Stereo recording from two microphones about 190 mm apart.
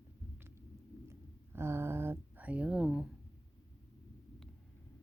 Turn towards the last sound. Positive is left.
turn(degrees=-5)  # may be behind; listen again after turning